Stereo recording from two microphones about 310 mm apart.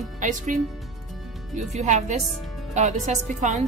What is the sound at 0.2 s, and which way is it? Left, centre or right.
Speech, right.